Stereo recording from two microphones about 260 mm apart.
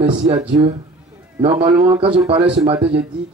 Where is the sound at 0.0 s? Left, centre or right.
Right.